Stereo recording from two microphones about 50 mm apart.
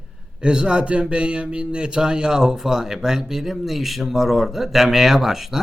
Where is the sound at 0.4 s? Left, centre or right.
Centre.